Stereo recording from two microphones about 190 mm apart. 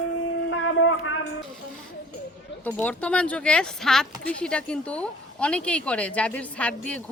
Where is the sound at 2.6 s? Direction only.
10° left (ahead or behind).